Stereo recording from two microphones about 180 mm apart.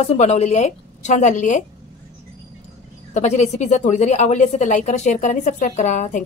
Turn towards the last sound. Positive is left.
turn(degrees=40)  # may be behind; listen again after turning